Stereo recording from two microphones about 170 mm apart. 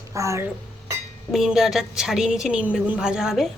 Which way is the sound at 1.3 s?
Centre (ahead or behind).